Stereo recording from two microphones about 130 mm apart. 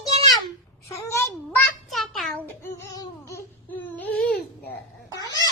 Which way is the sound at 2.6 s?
20° left (ahead or behind).